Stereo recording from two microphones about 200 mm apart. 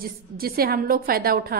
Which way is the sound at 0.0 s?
50° right (ahead or behind).